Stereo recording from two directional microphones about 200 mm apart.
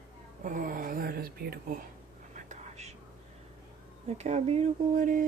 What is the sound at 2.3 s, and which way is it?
Whispering, 35° right (ahead or behind).